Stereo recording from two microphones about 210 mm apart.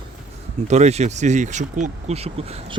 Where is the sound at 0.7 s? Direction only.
30° right (ahead or behind).